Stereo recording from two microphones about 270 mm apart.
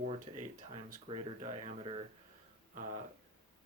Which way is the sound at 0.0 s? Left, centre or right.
Right.